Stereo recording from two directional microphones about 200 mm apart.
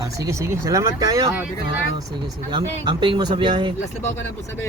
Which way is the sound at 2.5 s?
25° right (ahead or behind).